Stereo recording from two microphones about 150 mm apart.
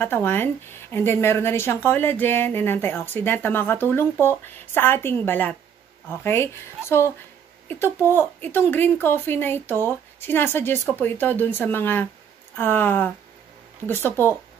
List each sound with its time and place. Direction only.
0.0 s speech: 15° left (ahead or behind)
8.1 s speech: 15° left (ahead or behind)